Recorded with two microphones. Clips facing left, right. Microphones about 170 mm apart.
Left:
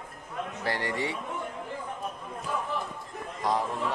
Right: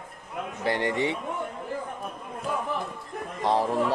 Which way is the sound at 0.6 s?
20° right (ahead or behind).